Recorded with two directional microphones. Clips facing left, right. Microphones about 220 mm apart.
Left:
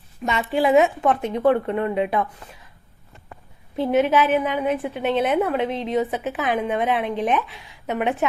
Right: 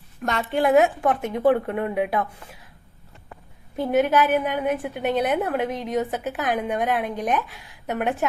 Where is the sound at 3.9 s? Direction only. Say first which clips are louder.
Left 1 dB; centre (ahead or behind).